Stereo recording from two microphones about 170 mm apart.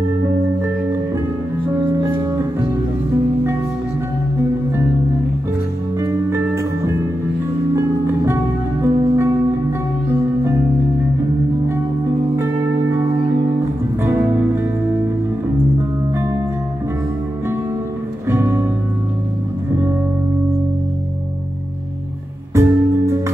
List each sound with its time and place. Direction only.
5.9 s music: 15° right (ahead or behind)
8.8 s music: 15° right (ahead or behind)
14.0 s music: 15° right (ahead or behind)
18.3 s music: 15° right (ahead or behind)
22.5 s music: 15° right (ahead or behind)